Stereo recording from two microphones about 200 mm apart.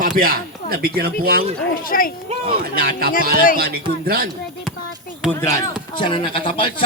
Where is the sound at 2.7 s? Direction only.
50° right (ahead or behind).